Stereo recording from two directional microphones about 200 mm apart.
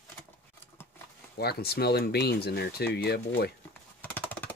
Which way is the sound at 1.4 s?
50° left (ahead or behind).